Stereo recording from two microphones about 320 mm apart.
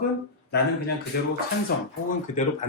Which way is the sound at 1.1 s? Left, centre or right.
Left.